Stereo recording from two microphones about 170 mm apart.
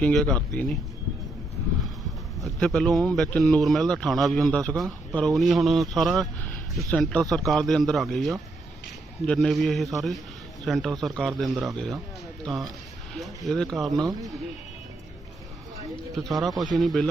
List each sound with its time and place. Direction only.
0.0 s speech: 5° left (ahead or behind)
2.4 s speech: centre (ahead or behind)
13.1 s speech: centre (ahead or behind)
14.0 s speech: 20° right (ahead or behind)
16.1 s speech: centre (ahead or behind)